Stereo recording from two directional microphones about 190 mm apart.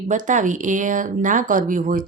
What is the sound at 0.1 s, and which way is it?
A woman's voice, 40° right (ahead or behind).